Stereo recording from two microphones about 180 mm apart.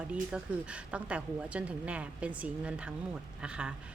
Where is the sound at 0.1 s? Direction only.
5° right (ahead or behind).